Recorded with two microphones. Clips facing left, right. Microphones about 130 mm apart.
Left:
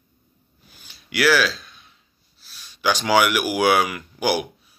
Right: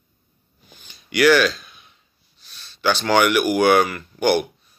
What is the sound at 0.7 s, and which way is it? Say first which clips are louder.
Speech: right 4 dB; 5° left (ahead or behind).